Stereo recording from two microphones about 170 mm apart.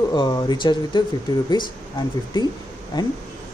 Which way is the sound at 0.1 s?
25° left (ahead or behind).